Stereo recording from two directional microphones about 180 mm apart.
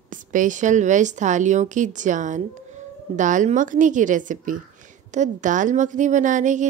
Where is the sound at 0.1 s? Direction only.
45° right (ahead or behind).